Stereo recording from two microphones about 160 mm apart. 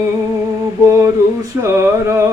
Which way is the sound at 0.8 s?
15° right (ahead or behind).